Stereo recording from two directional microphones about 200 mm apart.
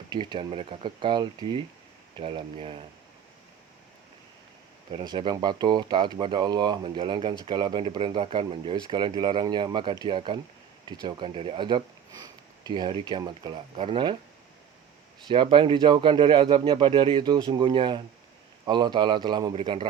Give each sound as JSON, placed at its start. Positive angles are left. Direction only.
{"t": 0.1, "sound": "speech", "side_deg": -20}
{"t": 4.9, "sound": "speech", "side_deg": -25}
{"t": 15.3, "sound": "speech", "side_deg": -25}